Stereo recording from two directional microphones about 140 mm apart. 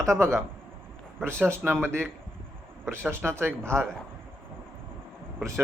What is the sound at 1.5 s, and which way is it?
Speech, 15° right (ahead or behind).